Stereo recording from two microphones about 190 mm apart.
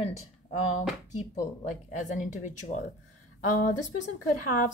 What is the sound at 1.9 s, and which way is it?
Speech, 40° left (ahead or behind).